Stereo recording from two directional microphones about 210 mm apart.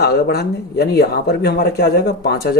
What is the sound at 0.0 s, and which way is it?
Speech, 50° left (ahead or behind).